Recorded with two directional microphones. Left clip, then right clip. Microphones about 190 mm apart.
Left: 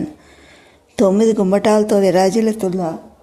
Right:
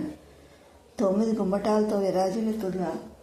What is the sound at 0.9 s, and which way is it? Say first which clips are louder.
Speech: left 12 dB; 45° left (ahead or behind).